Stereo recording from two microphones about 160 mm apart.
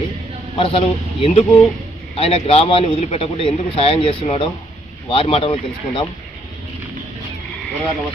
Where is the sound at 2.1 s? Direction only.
40° left (ahead or behind).